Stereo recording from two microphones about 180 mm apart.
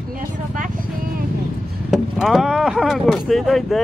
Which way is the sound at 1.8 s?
Centre (ahead or behind).